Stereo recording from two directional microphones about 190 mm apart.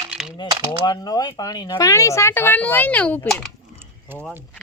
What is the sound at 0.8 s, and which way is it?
Speech, 20° left (ahead or behind).